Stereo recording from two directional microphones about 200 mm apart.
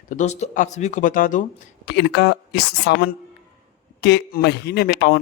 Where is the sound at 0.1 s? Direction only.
35° left (ahead or behind).